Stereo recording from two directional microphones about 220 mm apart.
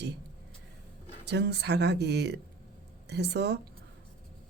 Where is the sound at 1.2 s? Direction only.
50° right (ahead or behind).